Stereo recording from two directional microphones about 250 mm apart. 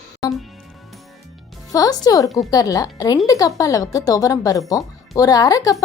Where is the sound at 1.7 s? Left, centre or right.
Centre.